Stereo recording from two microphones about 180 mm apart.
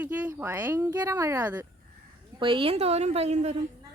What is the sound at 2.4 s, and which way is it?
A woman's voice, 30° right (ahead or behind).